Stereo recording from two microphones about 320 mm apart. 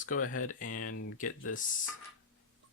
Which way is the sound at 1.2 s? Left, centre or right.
Left.